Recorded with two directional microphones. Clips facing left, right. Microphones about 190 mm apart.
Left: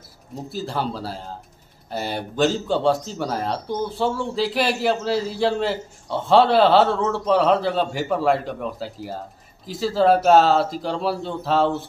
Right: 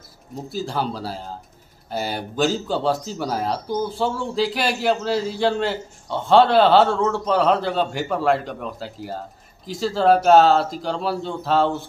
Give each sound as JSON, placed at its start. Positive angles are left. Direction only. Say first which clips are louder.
{"t": 0.5, "sound": "a man's voice", "louder": "right 1 dB", "side_deg": 0}